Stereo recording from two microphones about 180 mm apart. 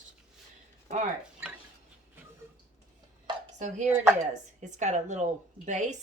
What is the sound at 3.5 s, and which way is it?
Speech, 40° right (ahead or behind).